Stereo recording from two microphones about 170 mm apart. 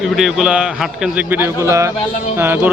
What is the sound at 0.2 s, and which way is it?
Speech, 5° right (ahead or behind).